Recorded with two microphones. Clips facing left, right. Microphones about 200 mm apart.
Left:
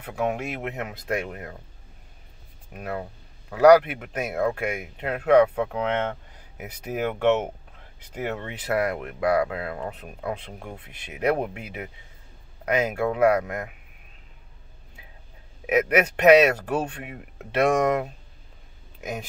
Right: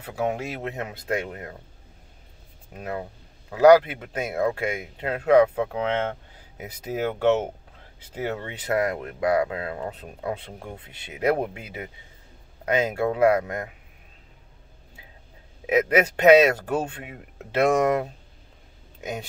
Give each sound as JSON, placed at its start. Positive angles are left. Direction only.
{"t": 0.0, "sound": "speech", "side_deg": -30}
{"t": 2.7, "sound": "speech", "side_deg": -25}
{"t": 15.6, "sound": "speech", "side_deg": -30}
{"t": 18.9, "sound": "speech", "side_deg": -30}